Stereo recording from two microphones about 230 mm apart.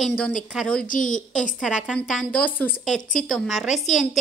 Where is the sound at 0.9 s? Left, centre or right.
Left.